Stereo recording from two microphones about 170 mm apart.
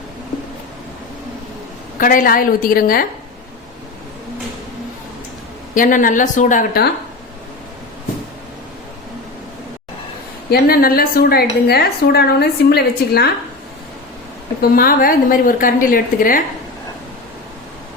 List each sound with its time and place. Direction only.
2.0 s a woman's voice: 55° left (ahead or behind)
5.7 s a woman's voice: 50° left (ahead or behind)
10.5 s a woman's voice: 60° left (ahead or behind)
14.6 s a woman's voice: 60° left (ahead or behind)